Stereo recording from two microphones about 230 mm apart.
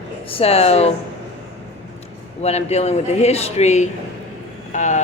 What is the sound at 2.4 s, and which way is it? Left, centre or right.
A man's voice, left.